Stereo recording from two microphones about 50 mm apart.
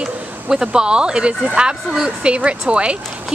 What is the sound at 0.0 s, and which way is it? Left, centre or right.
Speech, centre.